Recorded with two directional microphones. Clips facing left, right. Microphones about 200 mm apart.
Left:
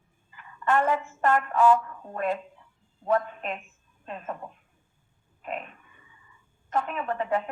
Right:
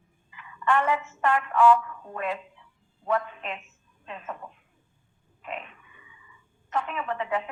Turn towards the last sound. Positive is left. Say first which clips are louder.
# left 2 dB
turn(degrees=45)  # may be behind; listen again after turning